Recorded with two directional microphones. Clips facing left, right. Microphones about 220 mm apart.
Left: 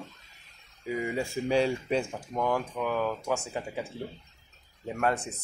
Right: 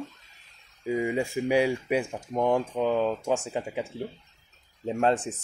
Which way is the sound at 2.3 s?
25° right (ahead or behind).